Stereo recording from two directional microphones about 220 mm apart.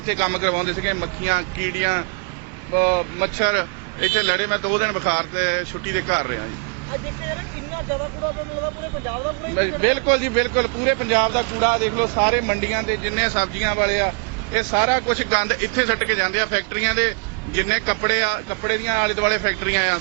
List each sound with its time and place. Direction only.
0.1 s speech: 15° right (ahead or behind)
9.8 s speech: 15° right (ahead or behind)